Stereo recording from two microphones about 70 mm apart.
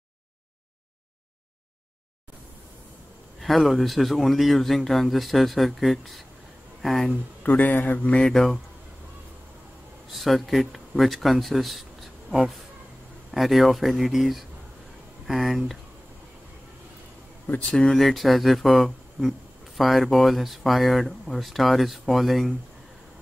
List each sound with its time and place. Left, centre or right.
3.3 s speech: centre
7.4 s speech: left
8.2 s speech: centre
10.1 s speech: centre
17.6 s speech: centre